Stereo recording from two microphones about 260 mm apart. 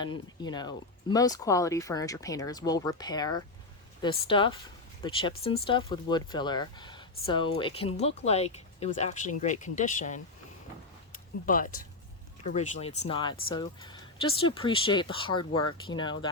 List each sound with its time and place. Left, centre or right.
0.0 s speech: centre
11.4 s speech: left